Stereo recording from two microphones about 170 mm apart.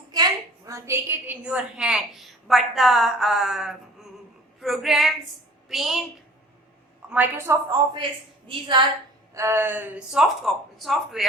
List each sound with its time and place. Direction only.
0.1 s a woman's voice: 20° right (ahead or behind); by 6.1 s centre (ahead or behind)
7.1 s a woman's voice: 10° right (ahead or behind)
8.4 s a woman's voice: 30° right (ahead or behind)
9.3 s speech: 15° right (ahead or behind); by 11.3 s centre (ahead or behind)